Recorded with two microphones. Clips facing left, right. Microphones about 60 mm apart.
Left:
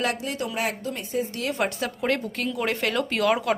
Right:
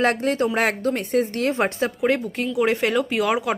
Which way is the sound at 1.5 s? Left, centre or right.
Right.